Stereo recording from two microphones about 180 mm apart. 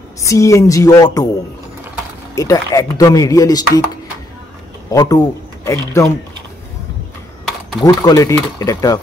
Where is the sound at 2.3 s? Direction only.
20° left (ahead or behind).